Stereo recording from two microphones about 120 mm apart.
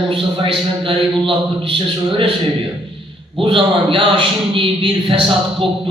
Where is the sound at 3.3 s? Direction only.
45° right (ahead or behind).